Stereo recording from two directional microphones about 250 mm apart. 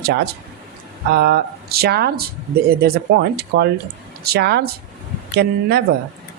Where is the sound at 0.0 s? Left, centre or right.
Right.